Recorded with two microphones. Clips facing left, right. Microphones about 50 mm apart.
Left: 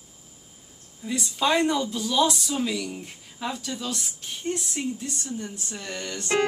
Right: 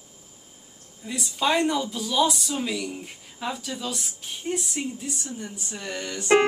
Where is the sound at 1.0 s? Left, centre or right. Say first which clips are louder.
Left 1 dB; centre.